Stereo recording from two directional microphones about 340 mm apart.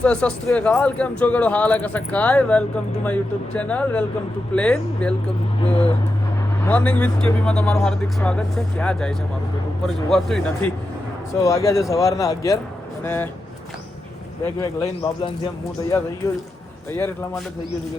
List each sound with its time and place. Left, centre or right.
0.0 s speech: centre
5.7 s vehicle: centre
6.7 s speech: centre
14.6 s speech: centre